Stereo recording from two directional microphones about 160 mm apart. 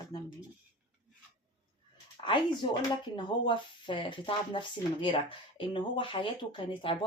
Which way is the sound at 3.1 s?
30° left (ahead or behind).